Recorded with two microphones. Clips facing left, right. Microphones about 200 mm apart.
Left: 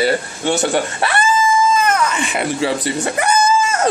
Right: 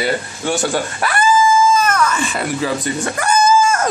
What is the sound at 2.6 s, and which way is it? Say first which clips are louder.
Speech: left 1 dB; 30° left (ahead or behind).